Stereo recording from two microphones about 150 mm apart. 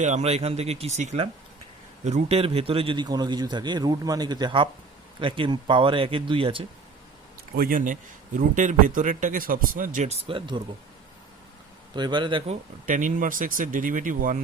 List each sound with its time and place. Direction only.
0.0 s a man's voice: 50° right (ahead or behind)
7.5 s speech: 75° right (ahead or behind); by 10.2 s 55° right (ahead or behind)
10.2 s speech: 35° right (ahead or behind)
11.9 s speech: 30° right (ahead or behind)
12.8 s speech: 60° right (ahead or behind)